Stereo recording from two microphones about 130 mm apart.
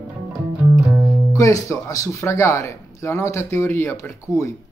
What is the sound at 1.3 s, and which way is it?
Speech, 25° left (ahead or behind).